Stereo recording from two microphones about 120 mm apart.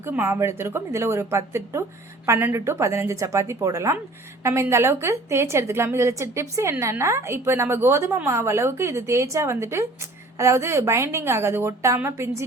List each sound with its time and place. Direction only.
0.0 s a woman's voice: 20° right (ahead or behind)